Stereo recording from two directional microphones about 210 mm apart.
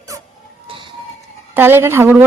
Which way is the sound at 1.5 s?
10° right (ahead or behind).